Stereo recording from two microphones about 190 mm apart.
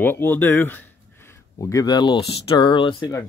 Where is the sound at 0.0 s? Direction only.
10° left (ahead or behind).